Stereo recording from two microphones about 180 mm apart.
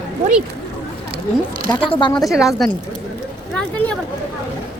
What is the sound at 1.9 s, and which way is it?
Speech, 25° left (ahead or behind).